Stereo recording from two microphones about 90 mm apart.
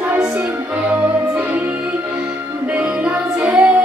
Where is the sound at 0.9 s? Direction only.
15° right (ahead or behind).